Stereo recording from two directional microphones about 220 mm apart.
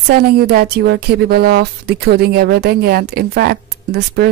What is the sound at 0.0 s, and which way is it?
Speech, 45° right (ahead or behind).